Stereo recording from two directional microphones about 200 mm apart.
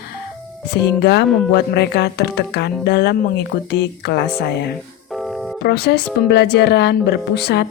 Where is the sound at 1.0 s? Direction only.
55° left (ahead or behind).